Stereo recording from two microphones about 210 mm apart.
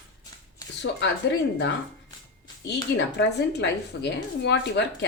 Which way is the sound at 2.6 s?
55° left (ahead or behind).